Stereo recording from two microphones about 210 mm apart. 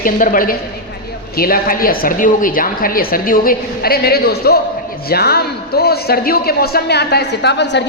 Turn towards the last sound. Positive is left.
turn(degrees=55)  # may be behind; listen again after turning